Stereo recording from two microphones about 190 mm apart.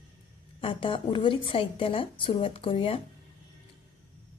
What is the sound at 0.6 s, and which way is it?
A woman's voice, 25° left (ahead or behind).